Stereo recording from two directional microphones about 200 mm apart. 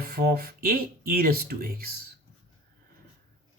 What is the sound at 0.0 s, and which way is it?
Speech, 50° right (ahead or behind).